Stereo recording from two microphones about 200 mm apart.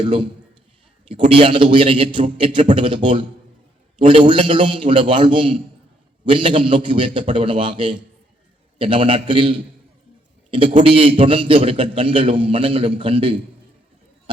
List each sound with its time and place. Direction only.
0.0 s a man's voice: 25° right (ahead or behind)